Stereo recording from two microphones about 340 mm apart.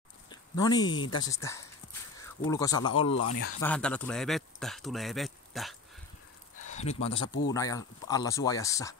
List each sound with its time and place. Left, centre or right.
0.3 s speech: centre
3.6 s speech: centre
6.7 s speech: centre